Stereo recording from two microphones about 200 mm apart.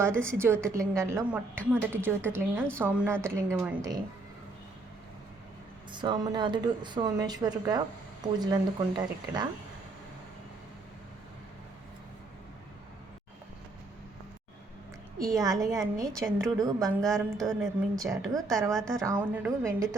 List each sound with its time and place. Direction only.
0.2 s a woman's voice: 15° right (ahead or behind)
5.9 s speech: 20° right (ahead or behind)
15.3 s a woman's voice: 15° right (ahead or behind)
16.1 s a woman's voice: centre (ahead or behind)
16.6 s a woman's voice: 20° right (ahead or behind)
17.0 s a woman's voice: centre (ahead or behind)
17.9 s a woman's voice: 15° right (ahead or behind)
18.3 s a woman's voice: centre (ahead or behind)
19.0 s a woman's voice: 10° right (ahead or behind)